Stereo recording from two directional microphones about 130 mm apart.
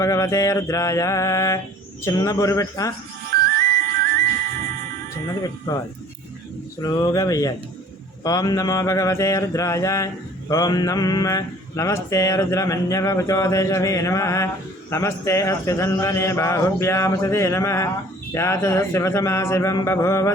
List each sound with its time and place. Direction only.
0.0 s speech: 25° left (ahead or behind)
5.4 s speech: 30° left (ahead or behind)
6.8 s speech: 30° left (ahead or behind)